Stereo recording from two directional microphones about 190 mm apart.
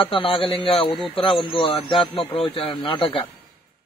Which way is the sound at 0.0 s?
30° left (ahead or behind).